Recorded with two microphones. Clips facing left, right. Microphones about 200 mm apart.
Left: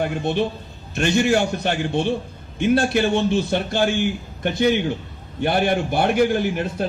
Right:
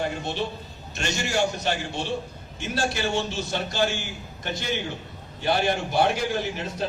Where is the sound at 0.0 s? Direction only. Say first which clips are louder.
Left 7 dB; 55° left (ahead or behind).